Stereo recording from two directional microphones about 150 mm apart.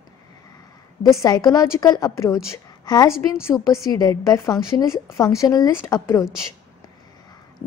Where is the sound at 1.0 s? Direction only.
20° left (ahead or behind).